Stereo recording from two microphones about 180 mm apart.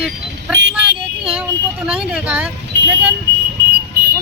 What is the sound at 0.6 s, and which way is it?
Speech, 75° right (ahead or behind).